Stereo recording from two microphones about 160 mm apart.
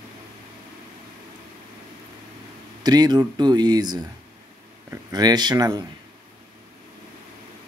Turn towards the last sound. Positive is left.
turn(degrees=-25)  # may be behind; listen again after turning